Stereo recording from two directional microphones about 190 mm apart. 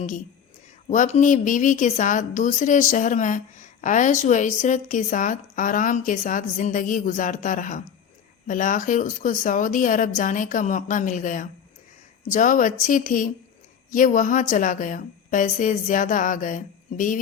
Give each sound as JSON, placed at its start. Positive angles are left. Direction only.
{"t": 0.9, "sound": "a woman's voice", "side_deg": 40}